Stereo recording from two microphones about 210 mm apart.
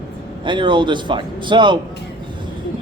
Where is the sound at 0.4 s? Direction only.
20° right (ahead or behind).